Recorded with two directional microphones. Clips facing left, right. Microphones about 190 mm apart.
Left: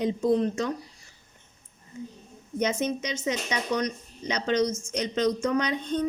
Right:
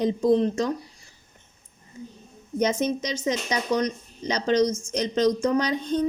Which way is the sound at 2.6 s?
35° right (ahead or behind).